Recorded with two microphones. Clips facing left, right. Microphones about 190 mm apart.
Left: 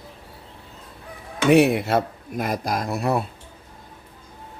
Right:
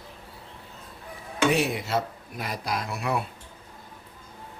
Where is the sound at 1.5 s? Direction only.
60° left (ahead or behind); by 3.2 s 40° left (ahead or behind).